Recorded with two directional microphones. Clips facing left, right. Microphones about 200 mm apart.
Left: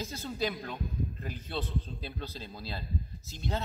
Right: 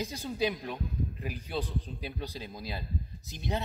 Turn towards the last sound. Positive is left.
turn(degrees=-15)  # may be behind; listen again after turning